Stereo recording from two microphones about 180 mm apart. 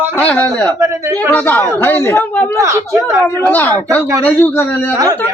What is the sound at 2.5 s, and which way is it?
Speech, 15° right (ahead or behind).